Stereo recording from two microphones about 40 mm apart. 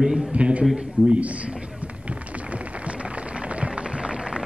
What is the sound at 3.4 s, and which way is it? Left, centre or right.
Music, right.